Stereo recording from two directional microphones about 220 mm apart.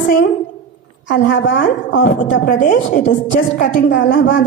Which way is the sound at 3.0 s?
55° left (ahead or behind).